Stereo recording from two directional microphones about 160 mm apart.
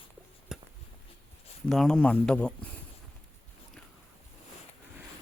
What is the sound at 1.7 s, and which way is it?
Speech, 5° left (ahead or behind).